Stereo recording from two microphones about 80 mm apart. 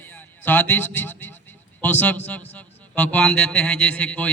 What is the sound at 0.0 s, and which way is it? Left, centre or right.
A man's voice, left.